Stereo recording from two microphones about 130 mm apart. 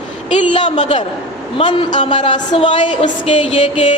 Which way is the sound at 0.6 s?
60° left (ahead or behind).